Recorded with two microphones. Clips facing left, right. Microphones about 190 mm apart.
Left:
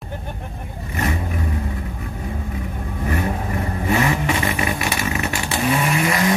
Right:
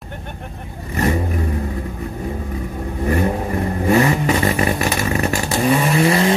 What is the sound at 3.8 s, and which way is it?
Vehicle, 40° right (ahead or behind).